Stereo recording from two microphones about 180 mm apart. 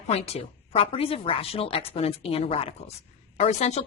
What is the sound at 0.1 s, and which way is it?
A woman's voice, 35° left (ahead or behind).